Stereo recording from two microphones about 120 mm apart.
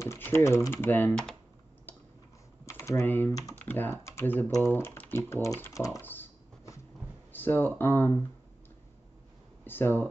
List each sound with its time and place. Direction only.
0.0 s typing: 20° left (ahead or behind)
0.7 s speech: 20° left (ahead or behind)
2.6 s speech: 25° left (ahead or behind)
5.9 s speech: 15° left (ahead or behind)
7.3 s speech: 15° left (ahead or behind)
9.7 s speech: 15° left (ahead or behind)